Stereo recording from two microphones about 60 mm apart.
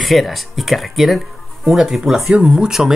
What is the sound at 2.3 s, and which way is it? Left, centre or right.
Speech, centre.